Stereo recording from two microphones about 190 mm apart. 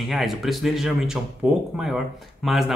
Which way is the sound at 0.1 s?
Centre (ahead or behind).